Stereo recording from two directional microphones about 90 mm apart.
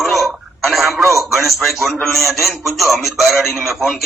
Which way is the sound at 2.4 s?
Centre (ahead or behind).